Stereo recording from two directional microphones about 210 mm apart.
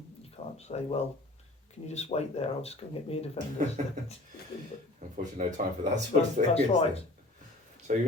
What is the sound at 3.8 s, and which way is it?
Speech, 35° right (ahead or behind).